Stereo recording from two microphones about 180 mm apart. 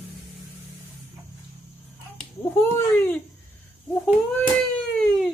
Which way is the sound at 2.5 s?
10° left (ahead or behind).